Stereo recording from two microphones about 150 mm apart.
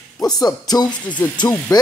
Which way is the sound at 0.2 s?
25° left (ahead or behind).